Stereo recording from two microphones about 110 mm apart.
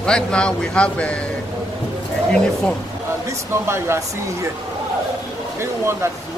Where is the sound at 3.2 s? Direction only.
25° right (ahead or behind).